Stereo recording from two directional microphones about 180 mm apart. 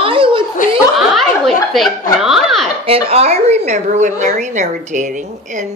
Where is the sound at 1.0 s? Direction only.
Centre (ahead or behind).